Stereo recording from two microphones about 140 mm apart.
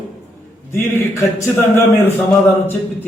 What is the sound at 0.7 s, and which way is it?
A man's voice, 20° left (ahead or behind).